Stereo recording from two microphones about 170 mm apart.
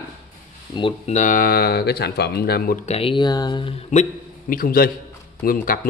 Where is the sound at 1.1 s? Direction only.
50° left (ahead or behind); by 2.8 s 65° left (ahead or behind).